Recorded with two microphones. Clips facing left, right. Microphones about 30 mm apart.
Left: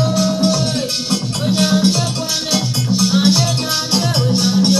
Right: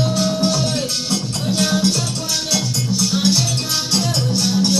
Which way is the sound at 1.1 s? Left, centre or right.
Centre.